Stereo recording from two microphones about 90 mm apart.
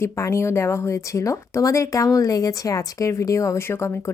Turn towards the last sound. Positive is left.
turn(degrees=30)  # may be behind; listen again after turning